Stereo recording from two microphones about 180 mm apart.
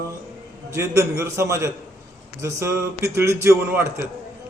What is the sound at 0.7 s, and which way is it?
Speech, 15° right (ahead or behind).